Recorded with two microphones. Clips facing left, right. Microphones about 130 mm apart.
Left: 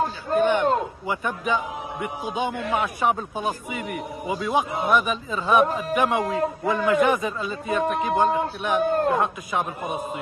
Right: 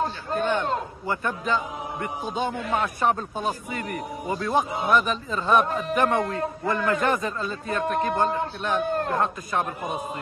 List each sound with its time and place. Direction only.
0.0 s a man's voice: 15° left (ahead or behind)
2.5 s a man's voice: 5° left (ahead or behind)